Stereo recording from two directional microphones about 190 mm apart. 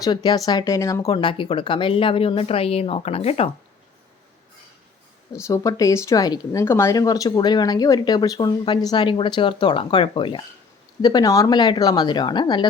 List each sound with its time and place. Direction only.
0.0 s speech: 20° left (ahead or behind)
5.3 s speech: 15° left (ahead or behind)